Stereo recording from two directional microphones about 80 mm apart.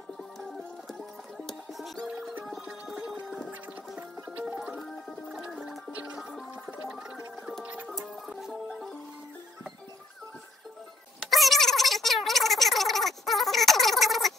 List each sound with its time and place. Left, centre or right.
0.2 s music: centre
4.4 s music: centre
7.9 s music: centre
11.2 s a sound: centre